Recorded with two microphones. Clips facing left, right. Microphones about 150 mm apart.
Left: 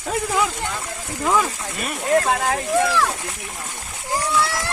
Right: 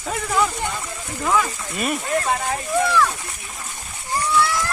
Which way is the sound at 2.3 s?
75° left (ahead or behind).